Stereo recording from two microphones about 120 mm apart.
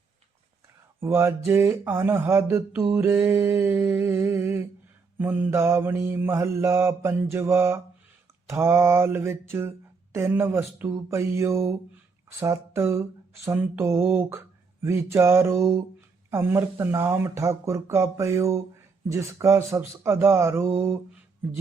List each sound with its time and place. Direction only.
0.9 s speech: 20° right (ahead or behind)